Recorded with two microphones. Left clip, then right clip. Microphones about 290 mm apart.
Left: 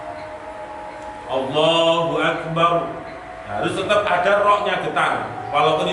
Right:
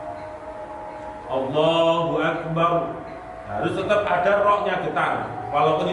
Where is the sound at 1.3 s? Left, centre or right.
Right.